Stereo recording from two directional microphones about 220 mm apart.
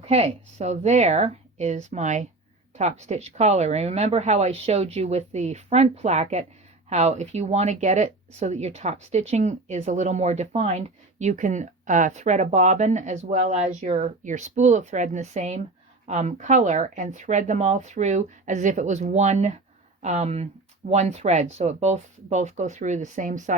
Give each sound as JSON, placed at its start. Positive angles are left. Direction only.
{"t": 0.0, "sound": "speech", "side_deg": -30}